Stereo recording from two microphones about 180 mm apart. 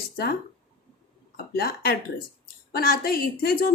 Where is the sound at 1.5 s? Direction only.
60° left (ahead or behind).